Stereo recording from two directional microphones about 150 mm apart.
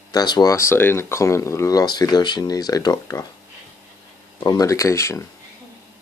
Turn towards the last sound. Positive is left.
turn(degrees=20)  # may be behind; listen again after turning